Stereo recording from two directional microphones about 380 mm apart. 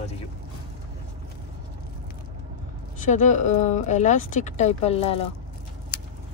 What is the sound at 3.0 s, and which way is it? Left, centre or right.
Speech, centre.